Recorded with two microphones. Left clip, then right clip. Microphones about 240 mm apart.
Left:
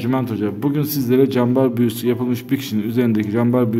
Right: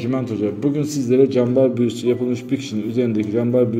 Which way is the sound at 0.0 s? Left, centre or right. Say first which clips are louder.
Left 1 dB; left.